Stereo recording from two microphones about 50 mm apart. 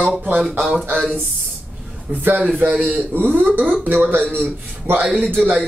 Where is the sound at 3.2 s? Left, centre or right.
Right.